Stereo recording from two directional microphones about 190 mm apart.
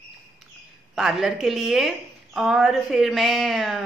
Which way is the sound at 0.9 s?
Centre (ahead or behind).